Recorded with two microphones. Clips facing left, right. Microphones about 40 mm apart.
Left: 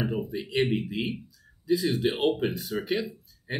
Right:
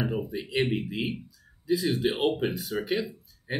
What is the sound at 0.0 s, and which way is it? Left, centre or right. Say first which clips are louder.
Speech: even; centre.